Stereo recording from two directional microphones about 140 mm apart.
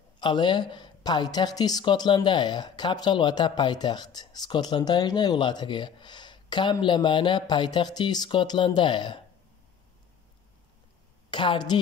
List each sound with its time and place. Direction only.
0.2 s a woman's voice: 35° left (ahead or behind)
11.2 s a woman's voice: 35° left (ahead or behind)